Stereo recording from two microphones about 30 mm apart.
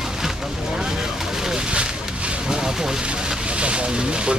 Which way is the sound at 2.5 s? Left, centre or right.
Centre.